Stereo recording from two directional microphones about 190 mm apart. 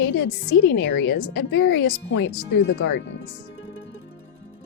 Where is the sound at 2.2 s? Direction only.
65° left (ahead or behind).